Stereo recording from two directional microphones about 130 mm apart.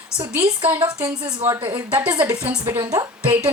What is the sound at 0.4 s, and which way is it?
Speech, 10° right (ahead or behind).